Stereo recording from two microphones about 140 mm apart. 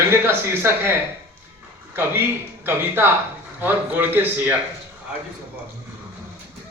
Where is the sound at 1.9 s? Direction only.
15° right (ahead or behind).